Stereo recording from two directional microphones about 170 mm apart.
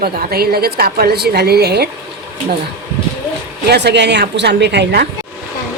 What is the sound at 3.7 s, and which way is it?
A woman's voice, 80° right.